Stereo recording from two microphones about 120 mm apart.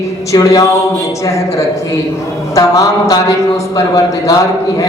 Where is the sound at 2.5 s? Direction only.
30° left (ahead or behind).